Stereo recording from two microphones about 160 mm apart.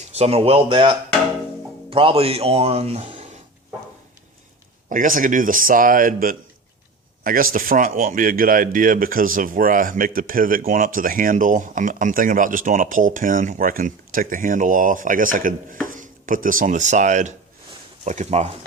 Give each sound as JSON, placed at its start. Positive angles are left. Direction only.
{"t": 0.1, "sound": "speech", "side_deg": -40}
{"t": 4.9, "sound": "speech", "side_deg": -55}
{"t": 15.9, "sound": "chopping", "side_deg": -55}
{"t": 18.0, "sound": "speech", "side_deg": -50}